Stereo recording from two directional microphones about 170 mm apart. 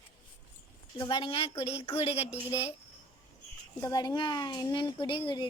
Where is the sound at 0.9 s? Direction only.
30° left (ahead or behind).